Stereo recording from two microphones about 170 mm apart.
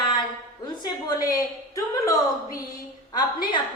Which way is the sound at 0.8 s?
25° left (ahead or behind).